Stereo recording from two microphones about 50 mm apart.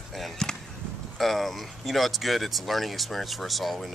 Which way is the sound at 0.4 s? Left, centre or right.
Centre.